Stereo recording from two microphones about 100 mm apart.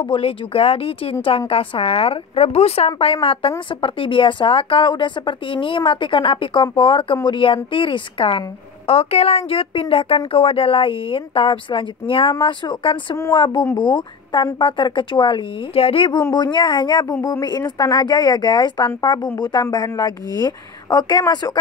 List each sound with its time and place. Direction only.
0.0 s a woman's voice: 70° left (ahead or behind); by 2.9 s 90° left
3.0 s a woman's voice: 70° left (ahead or behind); by 21.5 s 40° left (ahead or behind)